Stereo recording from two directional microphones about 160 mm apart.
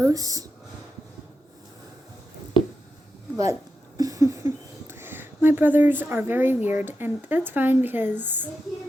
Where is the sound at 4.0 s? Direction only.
20° right (ahead or behind).